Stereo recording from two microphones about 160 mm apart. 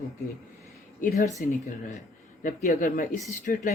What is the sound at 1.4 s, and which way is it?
Speech, 60° left (ahead or behind).